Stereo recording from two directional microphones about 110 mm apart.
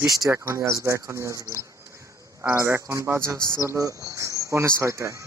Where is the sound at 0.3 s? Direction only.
25° right (ahead or behind).